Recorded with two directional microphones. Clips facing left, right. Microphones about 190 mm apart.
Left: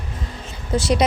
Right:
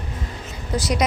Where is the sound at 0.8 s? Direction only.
25° left (ahead or behind).